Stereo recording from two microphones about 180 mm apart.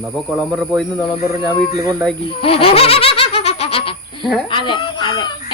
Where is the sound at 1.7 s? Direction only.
20° right (ahead or behind).